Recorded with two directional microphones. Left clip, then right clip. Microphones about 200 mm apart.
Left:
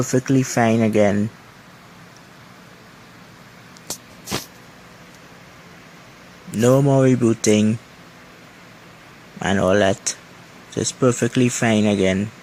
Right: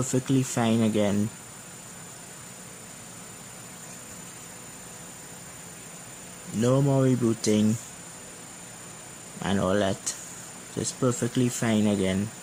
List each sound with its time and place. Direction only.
0.1 s speech: 15° left (ahead or behind)
6.6 s speech: 20° left (ahead or behind)
9.4 s speech: 20° left (ahead or behind)